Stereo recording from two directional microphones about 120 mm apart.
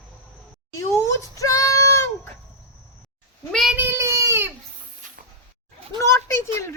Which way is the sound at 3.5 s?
Centre (ahead or behind).